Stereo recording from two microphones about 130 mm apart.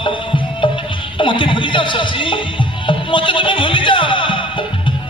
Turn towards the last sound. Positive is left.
turn(degrees=40)  # may be behind; listen again after turning